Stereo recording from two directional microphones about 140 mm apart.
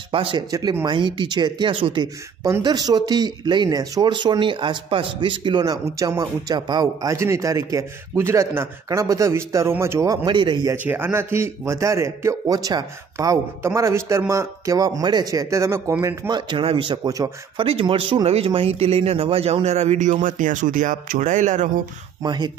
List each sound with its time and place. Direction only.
0.1 s speech: 40° right (ahead or behind)
0.5 s speech: 30° right (ahead or behind)
2.4 s speech: 25° right (ahead or behind)
10.2 s speech: 35° right (ahead or behind)
10.7 s speech: 15° right (ahead or behind)
16.3 s speech: 30° right (ahead or behind)
17.6 s speech: 40° right (ahead or behind); by 21.6 s 60° right (ahead or behind)
22.2 s speech: 30° right (ahead or behind)